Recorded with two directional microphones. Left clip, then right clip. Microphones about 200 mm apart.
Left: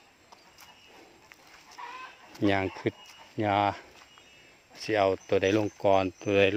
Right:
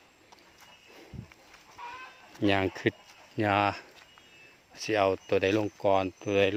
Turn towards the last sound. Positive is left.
turn(degrees=10)  # may be behind; listen again after turning